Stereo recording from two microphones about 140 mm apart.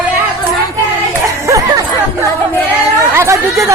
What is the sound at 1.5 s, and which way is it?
Music, 25° right (ahead or behind).